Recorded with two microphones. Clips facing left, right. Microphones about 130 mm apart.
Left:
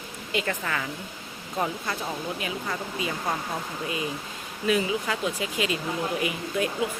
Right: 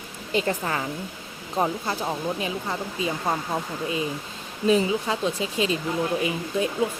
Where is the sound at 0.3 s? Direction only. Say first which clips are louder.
Right 4 dB; 30° right (ahead or behind).